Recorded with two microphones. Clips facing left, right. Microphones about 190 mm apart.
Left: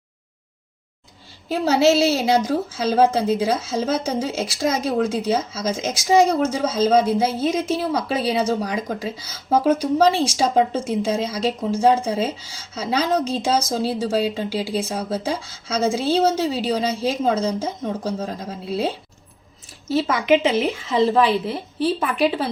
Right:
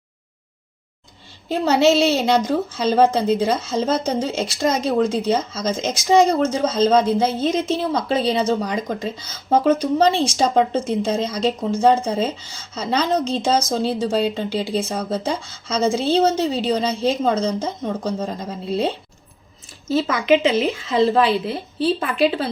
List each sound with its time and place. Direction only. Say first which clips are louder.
1.5 s a woman's voice: right 1 dB; 5° left (ahead or behind)
20.2 s a woman's voice: right 1 dB; 15° left (ahead or behind)